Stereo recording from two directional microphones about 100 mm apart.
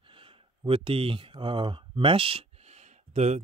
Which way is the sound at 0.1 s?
60° right (ahead or behind).